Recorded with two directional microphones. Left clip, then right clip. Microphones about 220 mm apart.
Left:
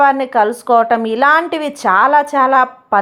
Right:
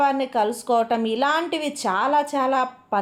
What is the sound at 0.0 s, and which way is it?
A woman's voice, 15° left (ahead or behind).